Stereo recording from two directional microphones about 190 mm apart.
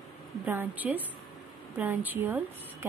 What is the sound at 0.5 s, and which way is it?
A woman's voice, 10° right (ahead or behind).